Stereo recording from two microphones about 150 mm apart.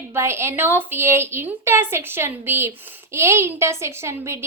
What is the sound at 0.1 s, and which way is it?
A woman's voice, 15° right (ahead or behind).